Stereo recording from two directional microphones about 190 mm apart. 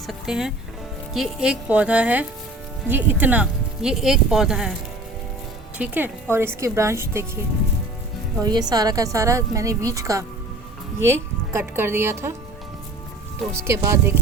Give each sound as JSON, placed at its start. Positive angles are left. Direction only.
{"t": 0.1, "sound": "a woman's voice", "side_deg": -5}
{"t": 5.7, "sound": "a woman's voice", "side_deg": -10}
{"t": 8.4, "sound": "a woman's voice", "side_deg": -20}
{"t": 13.5, "sound": "a woman's voice", "side_deg": -15}